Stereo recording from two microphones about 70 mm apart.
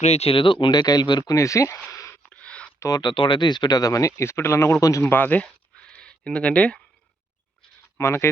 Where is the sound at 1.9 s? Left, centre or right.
Left.